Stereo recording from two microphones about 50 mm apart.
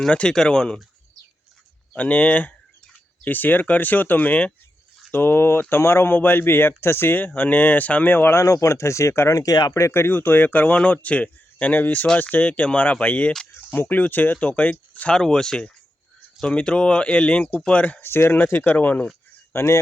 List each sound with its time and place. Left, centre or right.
0.1 s speech: centre
2.0 s speech: left
5.1 s speech: left
6.1 s speech: left
7.3 s speech: left
8.1 s speech: left
8.4 s speech: left
13.7 s speech: left
14.4 s speech: left
15.1 s speech: centre
18.0 s speech: left
19.5 s speech: left